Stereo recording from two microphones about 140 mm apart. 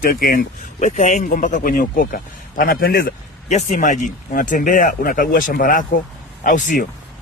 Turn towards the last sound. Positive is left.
turn(degrees=70)  # may be behind; listen again after turning